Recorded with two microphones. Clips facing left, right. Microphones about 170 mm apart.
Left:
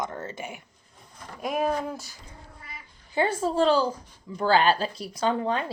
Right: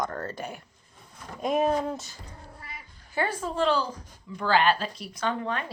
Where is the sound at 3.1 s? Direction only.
25° left (ahead or behind).